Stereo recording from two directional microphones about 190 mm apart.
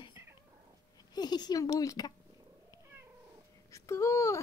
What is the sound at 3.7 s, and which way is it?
Speech, 15° left (ahead or behind).